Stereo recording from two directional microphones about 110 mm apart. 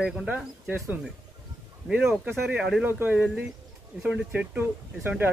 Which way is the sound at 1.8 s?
5° right (ahead or behind).